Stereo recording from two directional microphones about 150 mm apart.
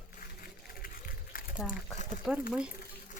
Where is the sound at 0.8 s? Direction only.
75° left (ahead or behind).